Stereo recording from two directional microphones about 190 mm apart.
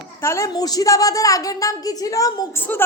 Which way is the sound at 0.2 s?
15° left (ahead or behind).